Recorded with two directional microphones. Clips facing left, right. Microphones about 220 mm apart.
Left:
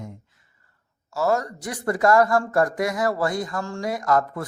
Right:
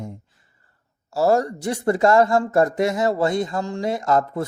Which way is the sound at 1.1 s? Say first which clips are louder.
Right 5 dB; 30° right (ahead or behind).